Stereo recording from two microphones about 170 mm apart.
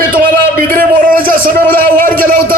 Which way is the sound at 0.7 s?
55° right (ahead or behind).